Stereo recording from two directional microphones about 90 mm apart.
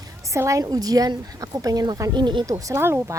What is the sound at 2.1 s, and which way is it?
Speech, 60° right (ahead or behind).